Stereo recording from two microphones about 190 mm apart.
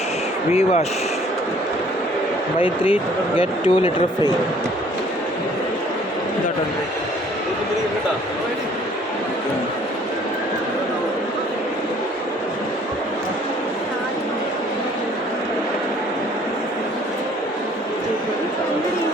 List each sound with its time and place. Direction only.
0.5 s speech: 35° left (ahead or behind)
2.6 s speech: 30° left (ahead or behind)